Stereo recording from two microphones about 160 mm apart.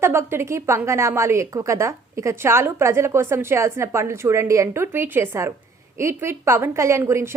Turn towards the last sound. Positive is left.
turn(degrees=-15)  # may be behind; listen again after turning